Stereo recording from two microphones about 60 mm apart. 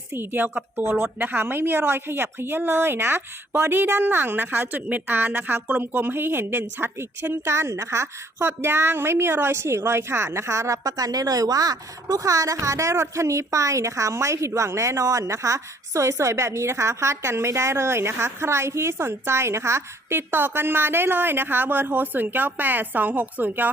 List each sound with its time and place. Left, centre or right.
0.1 s a woman's voice: right